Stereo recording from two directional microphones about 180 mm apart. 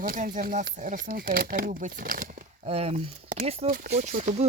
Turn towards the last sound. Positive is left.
turn(degrees=-35)  # may be behind; listen again after turning